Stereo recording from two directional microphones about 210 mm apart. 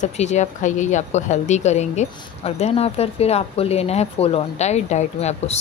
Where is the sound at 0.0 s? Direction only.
35° left (ahead or behind).